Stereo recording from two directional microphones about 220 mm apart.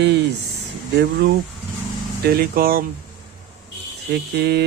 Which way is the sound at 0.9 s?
50° right (ahead or behind).